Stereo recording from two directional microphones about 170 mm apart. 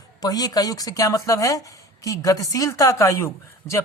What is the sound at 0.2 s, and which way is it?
Speech, 20° left (ahead or behind).